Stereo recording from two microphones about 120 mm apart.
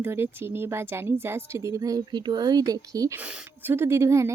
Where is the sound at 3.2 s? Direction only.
15° right (ahead or behind).